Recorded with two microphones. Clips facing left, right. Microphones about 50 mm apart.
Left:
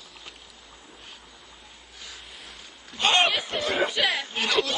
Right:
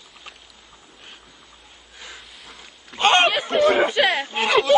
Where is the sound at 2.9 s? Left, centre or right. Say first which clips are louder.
Right 5 dB; right.